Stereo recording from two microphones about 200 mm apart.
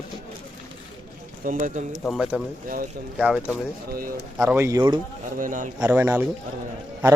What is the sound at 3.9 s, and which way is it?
Speech, 45° right (ahead or behind).